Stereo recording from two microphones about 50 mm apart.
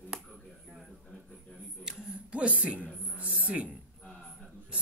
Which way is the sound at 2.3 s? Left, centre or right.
Right.